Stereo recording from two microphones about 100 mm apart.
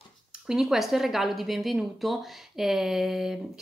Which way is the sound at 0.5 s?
5° right (ahead or behind).